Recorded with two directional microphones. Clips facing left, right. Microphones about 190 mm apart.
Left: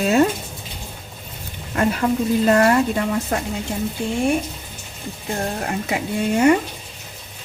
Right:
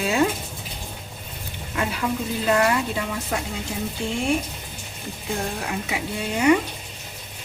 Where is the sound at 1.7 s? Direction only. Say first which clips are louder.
Left 6 dB; 45° left (ahead or behind).